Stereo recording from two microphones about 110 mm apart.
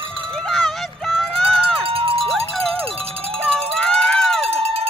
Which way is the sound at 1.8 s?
60° right (ahead or behind).